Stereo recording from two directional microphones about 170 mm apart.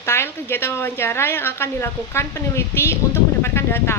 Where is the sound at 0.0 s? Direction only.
15° left (ahead or behind).